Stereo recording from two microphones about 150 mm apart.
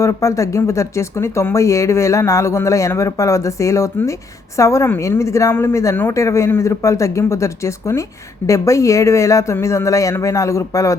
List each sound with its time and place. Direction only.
0.0 s speech: 20° left (ahead or behind)